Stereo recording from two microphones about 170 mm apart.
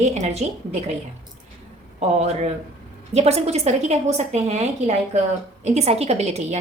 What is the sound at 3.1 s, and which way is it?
A woman's voice, 40° right (ahead or behind).